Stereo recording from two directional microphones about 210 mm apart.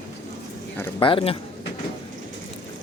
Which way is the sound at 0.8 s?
20° left (ahead or behind).